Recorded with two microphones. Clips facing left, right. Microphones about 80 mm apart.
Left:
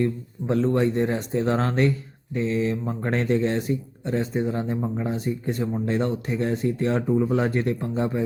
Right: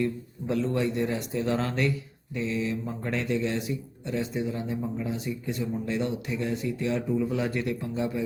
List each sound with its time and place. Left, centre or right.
0.0 s speech: left